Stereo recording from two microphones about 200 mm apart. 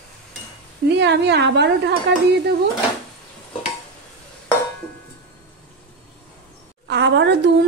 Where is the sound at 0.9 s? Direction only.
60° right (ahead or behind).